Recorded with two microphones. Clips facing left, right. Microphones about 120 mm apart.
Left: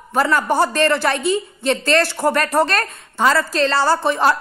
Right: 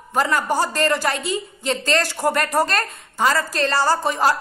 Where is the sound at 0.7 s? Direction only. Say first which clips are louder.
Left 3 dB; 60° left (ahead or behind).